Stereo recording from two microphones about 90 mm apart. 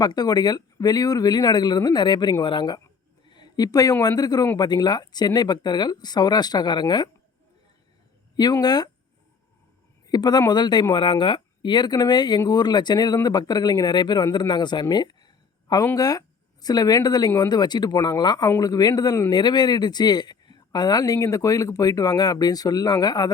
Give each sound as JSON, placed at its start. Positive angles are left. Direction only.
{"t": 0.0, "sound": "speech", "side_deg": 45}
{"t": 3.2, "sound": "a sound", "side_deg": 55}
{"t": 4.2, "sound": "speech", "side_deg": 45}
{"t": 8.6, "sound": "speech", "side_deg": 50}
{"t": 10.1, "sound": "speech", "side_deg": 50}